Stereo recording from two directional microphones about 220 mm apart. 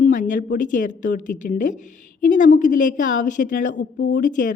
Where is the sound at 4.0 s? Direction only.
55° left (ahead or behind).